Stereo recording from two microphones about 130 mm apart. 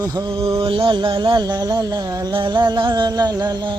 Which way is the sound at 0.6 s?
40° right (ahead or behind).